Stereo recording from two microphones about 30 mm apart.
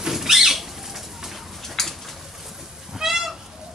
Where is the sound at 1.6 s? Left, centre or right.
Centre.